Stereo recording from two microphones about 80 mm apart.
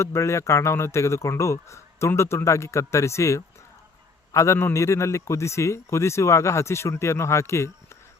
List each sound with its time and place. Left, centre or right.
0.0 s speech: left